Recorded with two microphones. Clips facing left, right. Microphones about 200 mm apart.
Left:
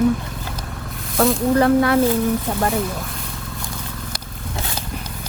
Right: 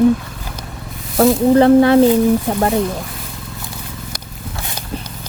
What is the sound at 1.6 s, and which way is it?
Speech, 30° right (ahead or behind).